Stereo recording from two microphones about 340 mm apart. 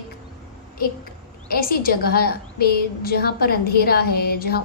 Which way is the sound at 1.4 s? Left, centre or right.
Left.